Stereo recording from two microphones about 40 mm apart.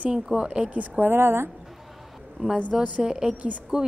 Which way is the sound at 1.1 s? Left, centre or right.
Right.